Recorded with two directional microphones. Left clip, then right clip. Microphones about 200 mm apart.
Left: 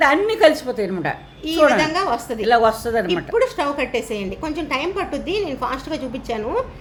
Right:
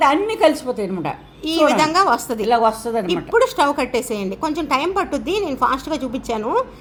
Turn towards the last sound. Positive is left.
turn(degrees=-25)  # may be behind; listen again after turning